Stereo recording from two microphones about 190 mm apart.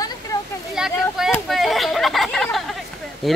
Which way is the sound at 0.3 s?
15° left (ahead or behind).